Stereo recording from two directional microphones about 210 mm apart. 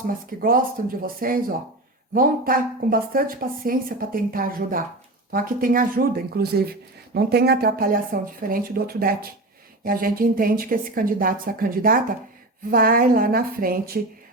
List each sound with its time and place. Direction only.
0.3 s speech: 40° right (ahead or behind)